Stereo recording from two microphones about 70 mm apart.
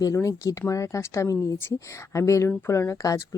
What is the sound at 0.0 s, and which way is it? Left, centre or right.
Speech, left.